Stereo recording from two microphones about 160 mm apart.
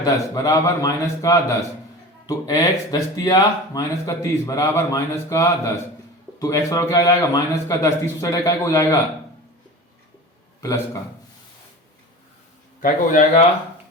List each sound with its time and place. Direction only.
0.0 s speech: 20° left (ahead or behind)
12.8 s a man's voice: 55° left (ahead or behind)